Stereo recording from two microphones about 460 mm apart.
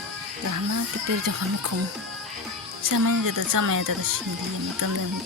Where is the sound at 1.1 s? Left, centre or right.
Right.